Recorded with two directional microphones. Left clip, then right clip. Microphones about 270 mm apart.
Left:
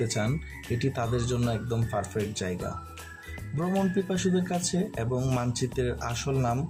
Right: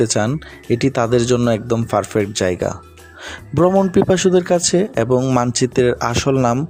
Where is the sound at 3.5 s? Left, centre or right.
Right.